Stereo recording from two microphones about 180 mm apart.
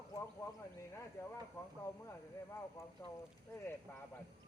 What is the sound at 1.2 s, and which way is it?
Speech, 15° left (ahead or behind).